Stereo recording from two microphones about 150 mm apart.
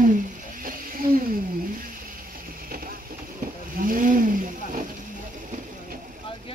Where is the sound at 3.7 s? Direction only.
65° right (ahead or behind).